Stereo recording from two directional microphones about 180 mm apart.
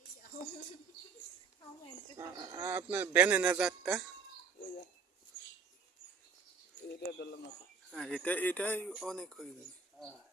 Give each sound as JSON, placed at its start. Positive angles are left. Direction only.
{"t": 2.1, "sound": "a sound", "side_deg": -20}
{"t": 6.8, "sound": "speech", "side_deg": 65}
{"t": 7.9, "sound": "speech", "side_deg": 0}